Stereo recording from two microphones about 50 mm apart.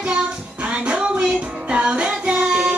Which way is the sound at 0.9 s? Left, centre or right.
Centre.